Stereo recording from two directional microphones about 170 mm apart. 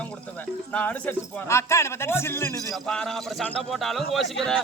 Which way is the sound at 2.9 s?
5° left (ahead or behind).